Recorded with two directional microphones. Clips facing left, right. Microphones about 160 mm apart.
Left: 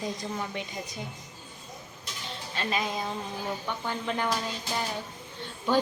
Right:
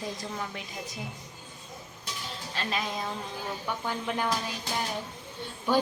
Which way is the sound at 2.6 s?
Centre (ahead or behind).